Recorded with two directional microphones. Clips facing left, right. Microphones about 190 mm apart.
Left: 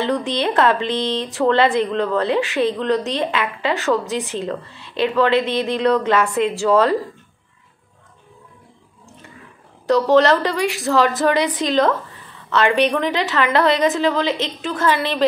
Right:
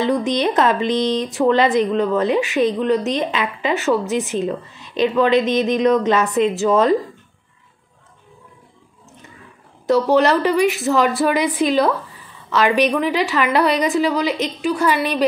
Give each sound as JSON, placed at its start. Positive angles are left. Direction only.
{"t": 0.0, "sound": "speech", "side_deg": -15}
{"t": 9.8, "sound": "speech", "side_deg": -15}